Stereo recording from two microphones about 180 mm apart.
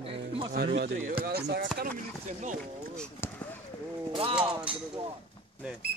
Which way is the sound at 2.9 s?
5° left (ahead or behind).